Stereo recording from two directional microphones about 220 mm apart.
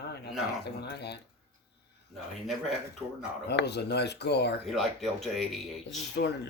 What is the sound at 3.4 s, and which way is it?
Speech, 50° left (ahead or behind).